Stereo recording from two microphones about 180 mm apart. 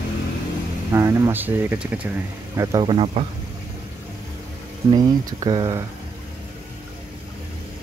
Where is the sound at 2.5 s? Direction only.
20° right (ahead or behind).